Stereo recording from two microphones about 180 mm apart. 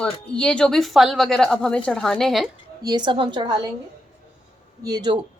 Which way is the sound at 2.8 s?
25° right (ahead or behind).